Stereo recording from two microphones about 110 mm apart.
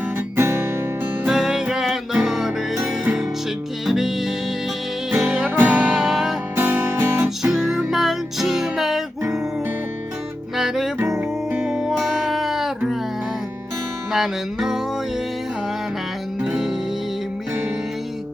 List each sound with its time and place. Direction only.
0.3 s music: 25° right (ahead or behind)
1.3 s music: 5° right (ahead or behind)
6.6 s music: 15° right (ahead or behind)
7.4 s music: 5° right (ahead or behind)
10.6 s music: 5° right (ahead or behind)
14.1 s music: 5° right (ahead or behind)
16.4 s music: 5° right (ahead or behind)